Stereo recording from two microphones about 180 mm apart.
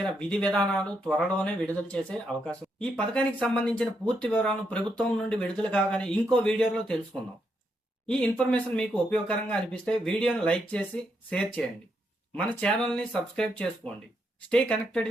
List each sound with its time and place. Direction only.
0.0 s speech: 5° left (ahead or behind)
8.0 s speech: 5° left (ahead or behind)